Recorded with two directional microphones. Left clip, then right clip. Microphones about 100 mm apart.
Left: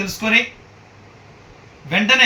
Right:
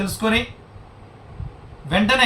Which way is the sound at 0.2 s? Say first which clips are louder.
Left 5 dB; 20° right (ahead or behind).